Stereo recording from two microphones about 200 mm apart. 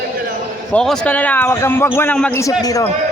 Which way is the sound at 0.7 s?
5° left (ahead or behind).